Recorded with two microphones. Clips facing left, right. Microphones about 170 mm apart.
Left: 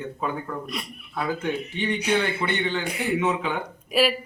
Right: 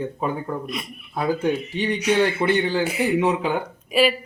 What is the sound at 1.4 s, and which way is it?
Speech, 35° right (ahead or behind).